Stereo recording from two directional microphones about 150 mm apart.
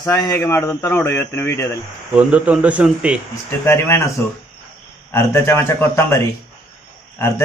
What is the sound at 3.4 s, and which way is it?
Speech, 15° left (ahead or behind).